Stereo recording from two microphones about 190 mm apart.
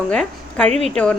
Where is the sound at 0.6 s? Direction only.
35° right (ahead or behind).